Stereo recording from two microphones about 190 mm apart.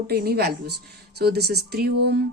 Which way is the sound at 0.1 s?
55° right (ahead or behind).